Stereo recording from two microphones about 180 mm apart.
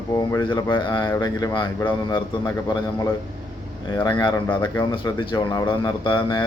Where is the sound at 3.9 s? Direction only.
20° left (ahead or behind).